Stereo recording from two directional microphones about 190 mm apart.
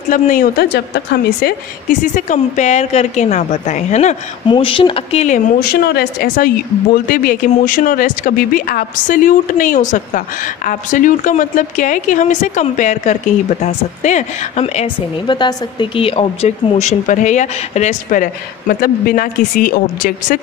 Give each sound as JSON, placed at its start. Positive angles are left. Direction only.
{"t": 0.1, "sound": "a woman's voice", "side_deg": 45}
{"t": 4.5, "sound": "speech", "side_deg": 25}
{"t": 5.6, "sound": "a woman's voice", "side_deg": 55}